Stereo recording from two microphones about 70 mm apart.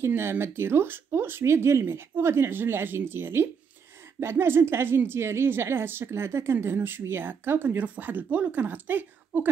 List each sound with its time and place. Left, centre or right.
0.0 s a woman's voice: right